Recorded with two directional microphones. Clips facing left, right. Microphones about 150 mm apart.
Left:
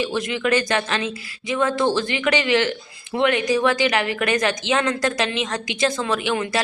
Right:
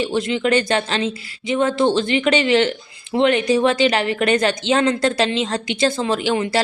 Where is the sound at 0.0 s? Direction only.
25° right (ahead or behind).